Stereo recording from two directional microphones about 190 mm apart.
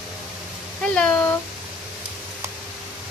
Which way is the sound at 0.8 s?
5° left (ahead or behind).